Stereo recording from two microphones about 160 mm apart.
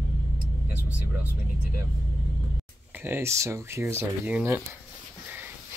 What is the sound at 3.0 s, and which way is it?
Speech, 15° right (ahead or behind).